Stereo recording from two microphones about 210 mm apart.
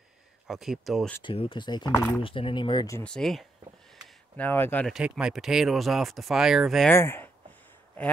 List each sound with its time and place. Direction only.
0.5 s speech: centre (ahead or behind)
1.2 s speech: 25° left (ahead or behind)
1.9 s speech: 10° left (ahead or behind)
2.2 s speech: 25° left (ahead or behind)
3.0 s speech: 5° left (ahead or behind)
6.9 s speech: 10° left (ahead or behind)